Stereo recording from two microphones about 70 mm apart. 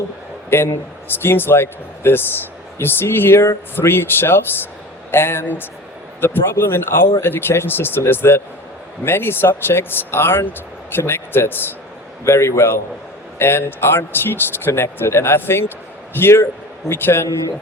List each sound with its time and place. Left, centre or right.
0.5 s a man's voice: left